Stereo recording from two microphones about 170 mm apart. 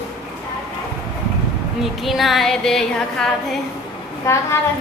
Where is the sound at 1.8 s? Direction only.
Centre (ahead or behind).